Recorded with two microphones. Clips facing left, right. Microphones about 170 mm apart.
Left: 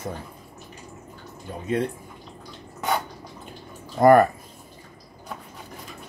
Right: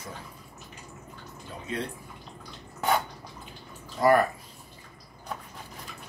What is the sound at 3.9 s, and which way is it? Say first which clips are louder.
Speech: left 7 dB; 50° left (ahead or behind).